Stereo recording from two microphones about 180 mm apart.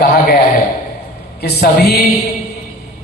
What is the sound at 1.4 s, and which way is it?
Speech, 60° left (ahead or behind).